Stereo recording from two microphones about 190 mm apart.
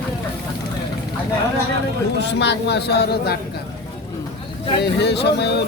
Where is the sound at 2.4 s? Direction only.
60° left (ahead or behind).